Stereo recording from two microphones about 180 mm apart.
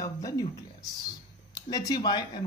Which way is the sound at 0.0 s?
20° left (ahead or behind).